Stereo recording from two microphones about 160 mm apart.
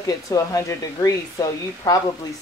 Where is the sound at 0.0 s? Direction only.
20° left (ahead or behind).